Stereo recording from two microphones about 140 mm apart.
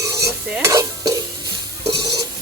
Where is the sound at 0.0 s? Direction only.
20° right (ahead or behind).